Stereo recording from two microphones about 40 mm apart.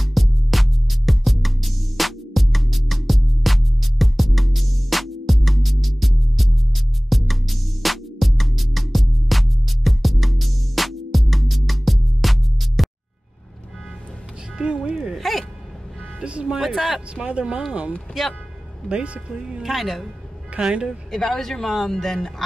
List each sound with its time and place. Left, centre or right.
0.0 s music: centre
14.9 s a sound: centre
15.1 s hiccup: centre
16.3 s music: right
16.5 s a sound: centre
17.1 s speech: right
18.9 s speech: right
19.6 s a woman's voice: centre
20.6 s speech: right
21.1 s a woman's voice: centre